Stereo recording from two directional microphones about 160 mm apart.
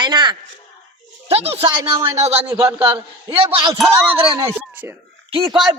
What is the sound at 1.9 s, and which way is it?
A woman's voice, 20° right (ahead or behind).